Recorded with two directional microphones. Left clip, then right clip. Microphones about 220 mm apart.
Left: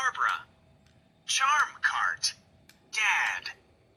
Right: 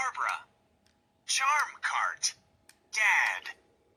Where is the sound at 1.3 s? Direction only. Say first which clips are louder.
Left 3 dB; 25° right (ahead or behind).